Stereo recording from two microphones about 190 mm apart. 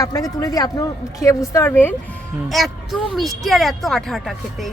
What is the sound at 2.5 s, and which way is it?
Speech, centre (ahead or behind).